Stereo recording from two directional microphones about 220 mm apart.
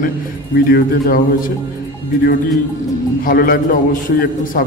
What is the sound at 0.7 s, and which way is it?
Speech, 40° left (ahead or behind).